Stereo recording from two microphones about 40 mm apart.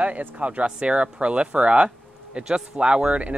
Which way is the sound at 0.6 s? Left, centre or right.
Right.